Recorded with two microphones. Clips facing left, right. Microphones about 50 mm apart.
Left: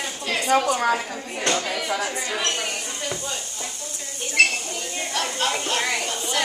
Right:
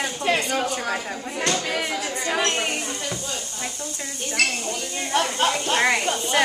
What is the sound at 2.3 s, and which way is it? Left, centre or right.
Speech, right.